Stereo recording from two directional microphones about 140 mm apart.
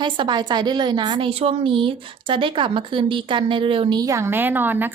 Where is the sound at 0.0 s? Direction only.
35° right (ahead or behind).